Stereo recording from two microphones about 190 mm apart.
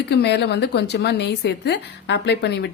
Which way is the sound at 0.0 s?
60° left (ahead or behind).